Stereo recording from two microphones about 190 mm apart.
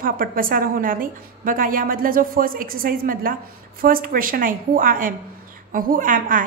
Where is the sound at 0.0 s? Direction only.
50° right (ahead or behind).